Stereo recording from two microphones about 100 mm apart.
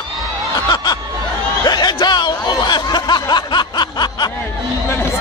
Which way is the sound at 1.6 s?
45° left (ahead or behind).